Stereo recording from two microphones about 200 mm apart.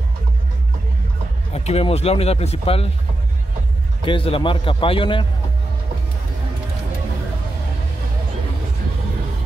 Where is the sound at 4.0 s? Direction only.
25° left (ahead or behind).